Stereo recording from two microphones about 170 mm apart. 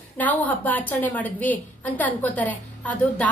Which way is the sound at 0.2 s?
10° left (ahead or behind).